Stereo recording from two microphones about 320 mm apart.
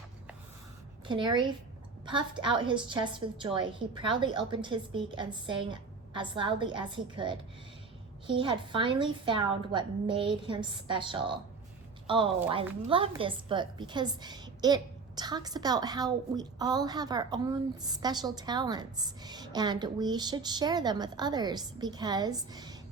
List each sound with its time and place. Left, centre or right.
1.0 s a woman's voice: centre